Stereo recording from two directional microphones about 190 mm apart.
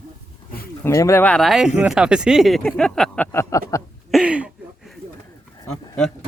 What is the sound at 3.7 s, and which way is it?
Speech, 15° left (ahead or behind).